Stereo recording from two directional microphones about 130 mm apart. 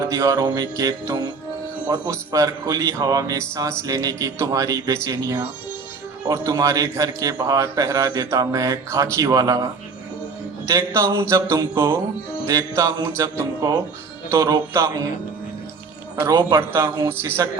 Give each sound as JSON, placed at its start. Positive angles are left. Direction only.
{"t": 0.0, "sound": "a man's voice", "side_deg": -25}
{"t": 10.7, "sound": "a man's voice", "side_deg": -20}
{"t": 16.6, "sound": "a man's voice", "side_deg": -20}